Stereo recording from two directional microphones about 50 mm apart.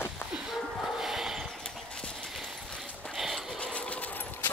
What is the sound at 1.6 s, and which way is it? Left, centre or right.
Clip-clop, centre.